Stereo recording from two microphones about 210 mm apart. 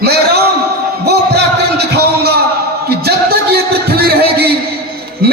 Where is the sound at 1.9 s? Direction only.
50° right (ahead or behind).